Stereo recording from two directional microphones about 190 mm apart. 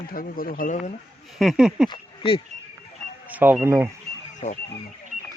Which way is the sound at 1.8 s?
25° left (ahead or behind).